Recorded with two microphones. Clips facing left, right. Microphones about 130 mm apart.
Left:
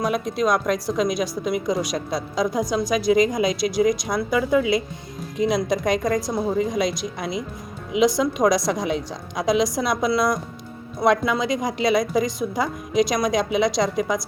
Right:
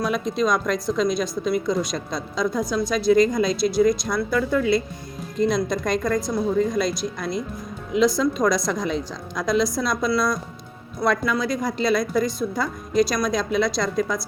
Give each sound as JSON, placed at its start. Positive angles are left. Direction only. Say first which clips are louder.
{"t": 0.3, "sound": "a woman's voice", "louder": "left 1 dB", "side_deg": 10}
{"t": 6.2, "sound": "a woman's voice", "louder": "right 1 dB", "side_deg": 25}